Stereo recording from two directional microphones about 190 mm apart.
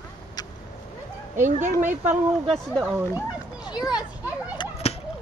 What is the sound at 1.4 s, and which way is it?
Speech, 40° right (ahead or behind).